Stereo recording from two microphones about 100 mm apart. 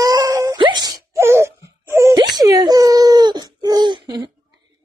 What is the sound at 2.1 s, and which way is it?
Wail, 40° right (ahead or behind).